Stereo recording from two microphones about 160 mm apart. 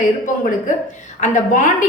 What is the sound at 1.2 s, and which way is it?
Speech, 50° left (ahead or behind).